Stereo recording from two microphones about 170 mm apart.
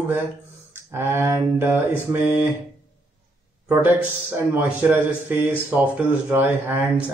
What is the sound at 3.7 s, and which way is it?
Speech, 10° right (ahead or behind).